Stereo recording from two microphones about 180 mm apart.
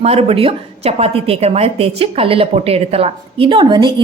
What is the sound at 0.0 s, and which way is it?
A woman's voice, 35° right (ahead or behind).